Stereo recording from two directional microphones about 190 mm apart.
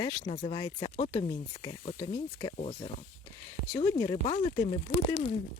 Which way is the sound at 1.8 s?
35° left (ahead or behind).